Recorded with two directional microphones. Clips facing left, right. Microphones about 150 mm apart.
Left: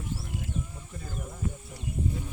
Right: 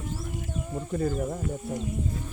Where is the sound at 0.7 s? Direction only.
65° right (ahead or behind).